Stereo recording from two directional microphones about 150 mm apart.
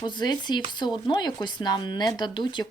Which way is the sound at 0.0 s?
30° left (ahead or behind).